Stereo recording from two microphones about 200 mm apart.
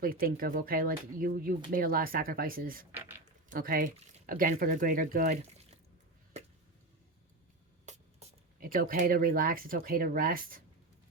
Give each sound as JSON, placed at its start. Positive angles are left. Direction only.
{"t": 0.0, "sound": "speech", "side_deg": -45}
{"t": 2.9, "sound": "speech", "side_deg": -10}
{"t": 3.5, "sound": "speech", "side_deg": -45}
{"t": 7.9, "sound": "speech", "side_deg": -40}